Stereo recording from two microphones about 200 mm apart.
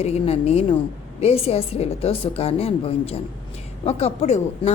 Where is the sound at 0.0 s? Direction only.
30° left (ahead or behind).